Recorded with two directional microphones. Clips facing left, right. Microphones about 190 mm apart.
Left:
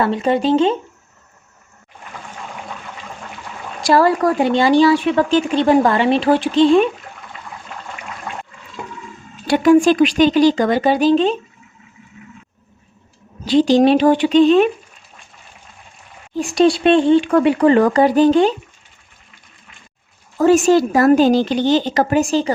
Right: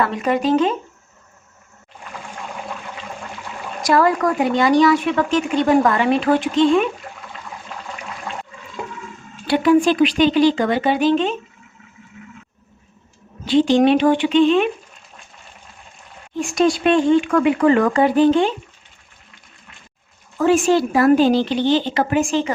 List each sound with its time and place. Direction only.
0.0 s speech: 30° left (ahead or behind)
3.8 s speech: 30° left (ahead or behind)
9.5 s speech: 45° left (ahead or behind)
13.4 s speech: 40° left (ahead or behind)
16.3 s speech: 35° left (ahead or behind)
20.4 s speech: 40° left (ahead or behind)